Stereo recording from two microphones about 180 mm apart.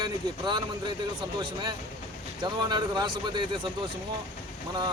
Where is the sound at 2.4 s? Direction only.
25° right (ahead or behind).